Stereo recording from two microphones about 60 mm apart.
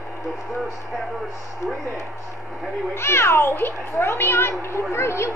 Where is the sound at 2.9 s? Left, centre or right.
Left.